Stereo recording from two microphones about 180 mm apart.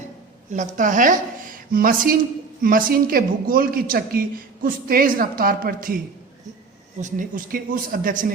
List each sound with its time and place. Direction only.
0.5 s a woman's voice: 45° right (ahead or behind)
7.0 s a woman's voice: 50° right (ahead or behind)